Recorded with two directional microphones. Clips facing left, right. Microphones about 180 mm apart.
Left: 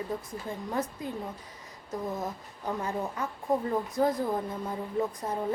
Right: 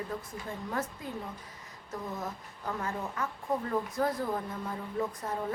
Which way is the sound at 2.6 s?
20° left (ahead or behind).